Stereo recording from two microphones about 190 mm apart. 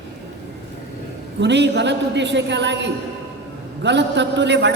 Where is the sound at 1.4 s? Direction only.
65° right (ahead or behind).